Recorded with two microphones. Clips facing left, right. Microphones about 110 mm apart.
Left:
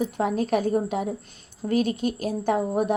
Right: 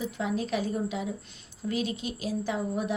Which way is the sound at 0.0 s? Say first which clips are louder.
Left 6 dB; 50° left (ahead or behind).